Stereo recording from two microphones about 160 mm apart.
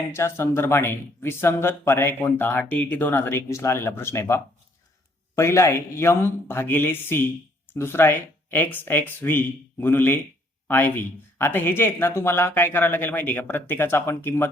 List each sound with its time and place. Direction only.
0.1 s speech: 15° left (ahead or behind)